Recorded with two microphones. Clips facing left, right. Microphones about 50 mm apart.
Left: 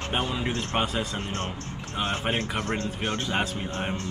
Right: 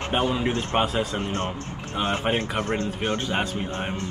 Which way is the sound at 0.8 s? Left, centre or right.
Centre.